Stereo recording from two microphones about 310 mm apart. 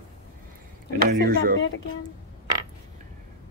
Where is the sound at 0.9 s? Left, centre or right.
Right.